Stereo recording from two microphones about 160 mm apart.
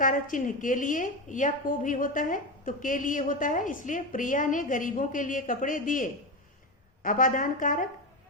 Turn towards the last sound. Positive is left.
turn(degrees=55)  # may be behind; listen again after turning